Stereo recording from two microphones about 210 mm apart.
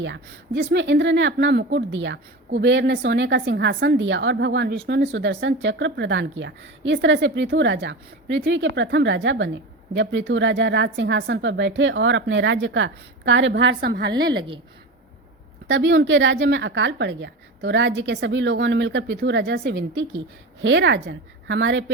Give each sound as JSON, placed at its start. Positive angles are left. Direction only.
{"t": 0.0, "sound": "speech", "side_deg": -55}
{"t": 15.6, "sound": "speech", "side_deg": -55}